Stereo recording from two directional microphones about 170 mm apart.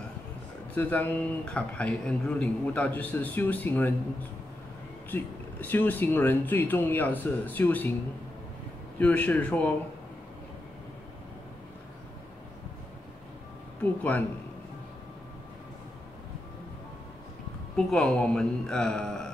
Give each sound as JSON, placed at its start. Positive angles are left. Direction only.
{"t": 0.7, "sound": "a man's voice", "side_deg": 10}
{"t": 9.0, "sound": "a man's voice", "side_deg": 10}
{"t": 17.7, "sound": "speech", "side_deg": 5}